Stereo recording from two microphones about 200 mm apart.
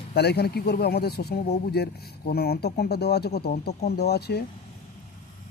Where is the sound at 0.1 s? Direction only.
55° left (ahead or behind).